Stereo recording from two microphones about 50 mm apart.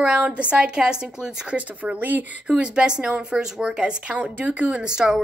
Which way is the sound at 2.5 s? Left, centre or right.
Centre.